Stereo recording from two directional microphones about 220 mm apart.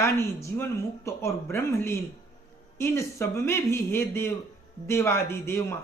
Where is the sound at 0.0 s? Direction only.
15° left (ahead or behind).